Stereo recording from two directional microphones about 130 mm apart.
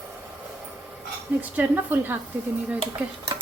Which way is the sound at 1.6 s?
15° right (ahead or behind).